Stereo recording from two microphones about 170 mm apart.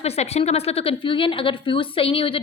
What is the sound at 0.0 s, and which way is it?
A woman's voice, 40° left (ahead or behind).